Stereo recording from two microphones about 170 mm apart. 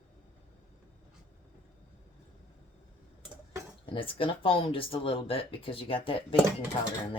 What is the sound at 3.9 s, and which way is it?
Speech, 30° left (ahead or behind).